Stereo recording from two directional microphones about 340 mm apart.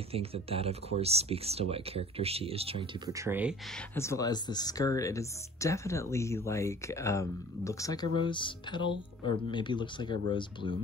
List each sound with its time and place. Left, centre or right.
0.1 s speech: centre
3.9 s speech: centre